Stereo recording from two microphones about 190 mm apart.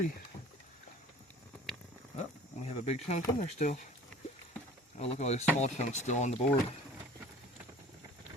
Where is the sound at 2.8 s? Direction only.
35° left (ahead or behind).